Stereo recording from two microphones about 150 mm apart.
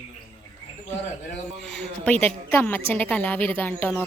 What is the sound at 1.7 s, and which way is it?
A woman's voice, 10° left (ahead or behind).